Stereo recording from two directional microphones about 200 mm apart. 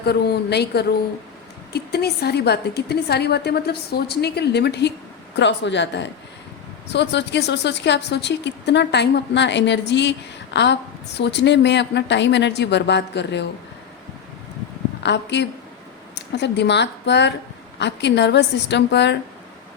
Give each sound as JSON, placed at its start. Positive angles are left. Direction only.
{"t": 0.0, "sound": "a woman's voice", "side_deg": 55}
{"t": 15.0, "sound": "a woman's voice", "side_deg": 60}